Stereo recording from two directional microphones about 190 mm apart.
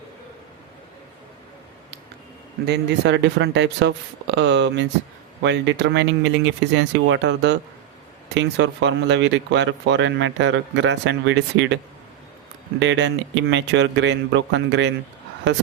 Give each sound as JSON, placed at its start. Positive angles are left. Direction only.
{"t": 2.6, "sound": "speech", "side_deg": -60}
{"t": 12.8, "sound": "speech", "side_deg": -70}